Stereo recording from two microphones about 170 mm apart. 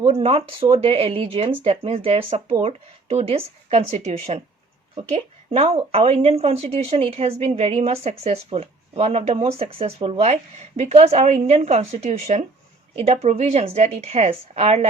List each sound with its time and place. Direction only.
0.1 s a woman's voice: 35° right (ahead or behind)